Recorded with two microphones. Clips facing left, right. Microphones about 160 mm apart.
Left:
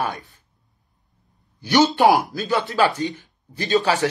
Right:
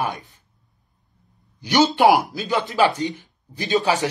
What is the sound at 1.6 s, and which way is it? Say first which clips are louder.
Speech: even; 15° right (ahead or behind).